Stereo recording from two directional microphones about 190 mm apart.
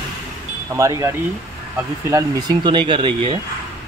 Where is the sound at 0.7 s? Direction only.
15° right (ahead or behind).